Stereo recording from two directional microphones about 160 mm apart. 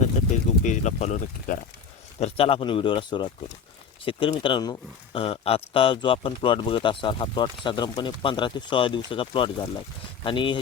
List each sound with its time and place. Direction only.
0.6 s speech: 50° left (ahead or behind)
2.2 s speech: 35° left (ahead or behind)